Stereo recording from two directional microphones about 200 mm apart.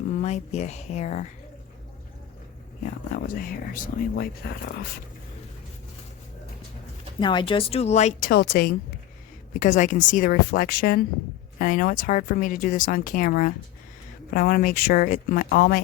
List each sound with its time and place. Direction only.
0.2 s a woman's voice: 35° left (ahead or behind)
2.8 s speech: 40° left (ahead or behind)
7.2 s speech: 25° left (ahead or behind)
8.3 s speech: 50° left (ahead or behind)
9.6 s a woman's voice: 40° left (ahead or behind)